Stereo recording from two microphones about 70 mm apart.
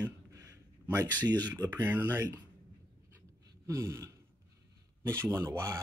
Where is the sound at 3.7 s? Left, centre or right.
Right.